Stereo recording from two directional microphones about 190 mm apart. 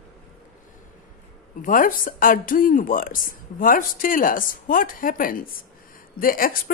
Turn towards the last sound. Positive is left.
turn(degrees=50)  # may be behind; listen again after turning